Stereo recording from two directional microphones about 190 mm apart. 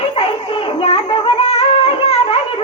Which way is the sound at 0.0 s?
25° left (ahead or behind).